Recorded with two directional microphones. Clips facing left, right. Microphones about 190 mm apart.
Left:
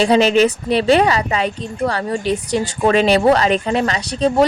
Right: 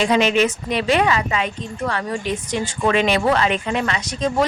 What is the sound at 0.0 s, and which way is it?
A woman's voice, 35° left (ahead or behind).